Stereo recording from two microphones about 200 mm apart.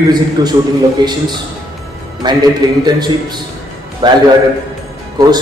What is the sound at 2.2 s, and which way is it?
A man's voice, 20° right (ahead or behind).